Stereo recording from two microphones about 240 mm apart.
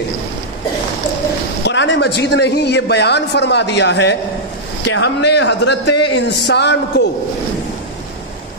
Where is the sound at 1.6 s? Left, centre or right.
Left.